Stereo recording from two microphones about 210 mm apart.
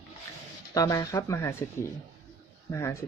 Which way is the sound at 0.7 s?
15° left (ahead or behind).